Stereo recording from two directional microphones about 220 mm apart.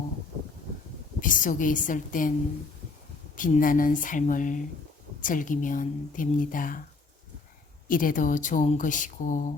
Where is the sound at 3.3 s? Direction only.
35° left (ahead or behind).